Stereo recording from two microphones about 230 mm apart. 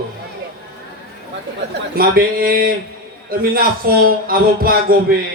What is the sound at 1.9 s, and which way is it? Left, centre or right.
A man's voice, right.